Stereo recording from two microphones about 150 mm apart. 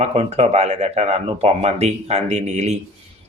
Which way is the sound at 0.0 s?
45° right (ahead or behind).